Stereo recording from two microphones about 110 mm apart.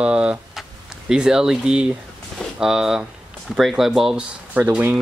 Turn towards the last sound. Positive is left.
turn(degrees=-15)  # may be behind; listen again after turning